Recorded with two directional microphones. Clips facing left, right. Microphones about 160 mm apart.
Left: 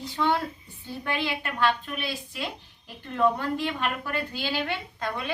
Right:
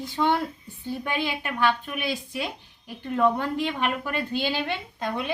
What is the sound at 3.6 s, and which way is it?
A woman's voice, 20° right (ahead or behind).